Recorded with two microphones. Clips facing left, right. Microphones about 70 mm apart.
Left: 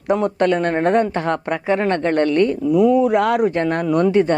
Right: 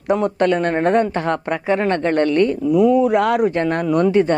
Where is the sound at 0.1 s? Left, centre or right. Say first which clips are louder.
Even; right.